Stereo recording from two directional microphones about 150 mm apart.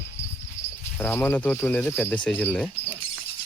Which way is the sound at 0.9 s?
15° left (ahead or behind).